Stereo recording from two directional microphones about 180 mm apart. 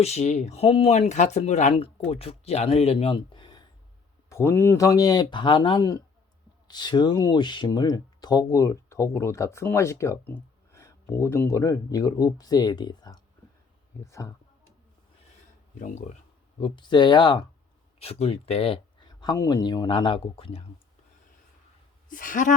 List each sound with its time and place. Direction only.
0.0 s speech: 40° left (ahead or behind); by 14.3 s 15° left (ahead or behind)
15.8 s speech: 40° left (ahead or behind)
16.6 s speech: 30° left (ahead or behind)
22.1 s a woman's voice: 50° left (ahead or behind)